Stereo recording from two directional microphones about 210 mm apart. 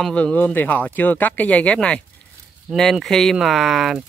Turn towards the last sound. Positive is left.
turn(degrees=0)  # may be behind; listen again after turning